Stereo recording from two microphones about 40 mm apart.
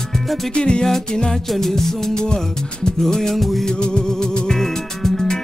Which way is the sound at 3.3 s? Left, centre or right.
Centre.